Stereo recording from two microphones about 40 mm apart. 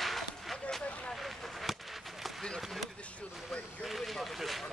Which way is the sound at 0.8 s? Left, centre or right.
Left.